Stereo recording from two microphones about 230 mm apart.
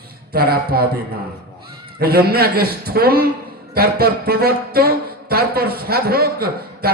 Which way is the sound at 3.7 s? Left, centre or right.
Right.